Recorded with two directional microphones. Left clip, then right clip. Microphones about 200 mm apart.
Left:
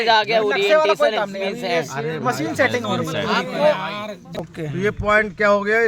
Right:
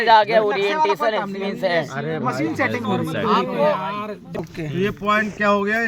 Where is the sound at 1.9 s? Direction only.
20° left (ahead or behind).